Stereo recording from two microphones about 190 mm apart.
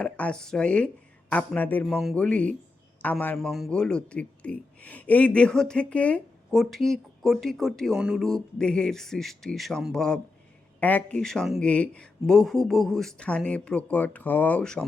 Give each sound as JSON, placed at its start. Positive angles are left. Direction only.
{"t": 0.0, "sound": "a man's voice", "side_deg": 5}